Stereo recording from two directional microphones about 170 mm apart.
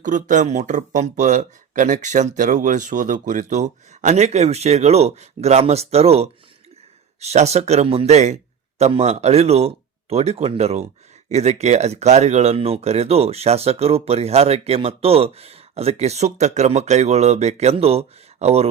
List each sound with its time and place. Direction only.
0.0 s speech: 50° right (ahead or behind)